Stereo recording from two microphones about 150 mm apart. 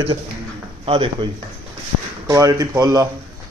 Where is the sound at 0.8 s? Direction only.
35° right (ahead or behind).